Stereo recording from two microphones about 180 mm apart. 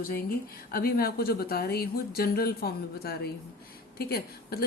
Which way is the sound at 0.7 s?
55° left (ahead or behind).